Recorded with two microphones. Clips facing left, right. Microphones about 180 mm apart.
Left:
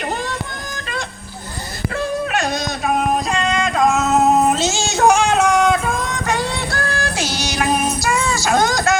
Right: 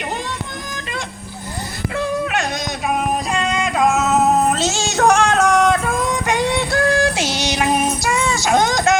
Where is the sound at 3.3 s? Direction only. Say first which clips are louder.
Left 1 dB; 10° right (ahead or behind).